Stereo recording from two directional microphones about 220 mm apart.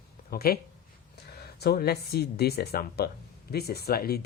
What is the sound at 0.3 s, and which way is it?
Speech, 45° left (ahead or behind).